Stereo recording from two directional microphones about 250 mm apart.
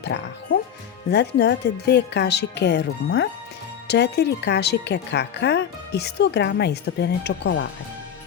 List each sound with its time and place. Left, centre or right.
0.0 s speech: left